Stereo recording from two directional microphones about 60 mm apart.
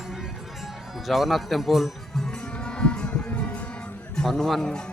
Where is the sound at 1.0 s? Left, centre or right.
Centre.